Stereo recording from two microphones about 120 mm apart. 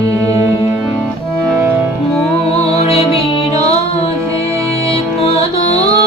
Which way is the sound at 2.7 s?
55° left (ahead or behind).